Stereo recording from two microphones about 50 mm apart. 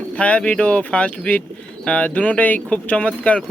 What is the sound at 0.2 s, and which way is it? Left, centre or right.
Speech, left.